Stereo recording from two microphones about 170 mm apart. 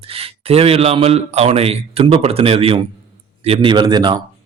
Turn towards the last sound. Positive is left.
turn(degrees=-25)  # may be behind; listen again after turning